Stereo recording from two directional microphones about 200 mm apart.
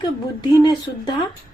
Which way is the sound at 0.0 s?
20° left (ahead or behind).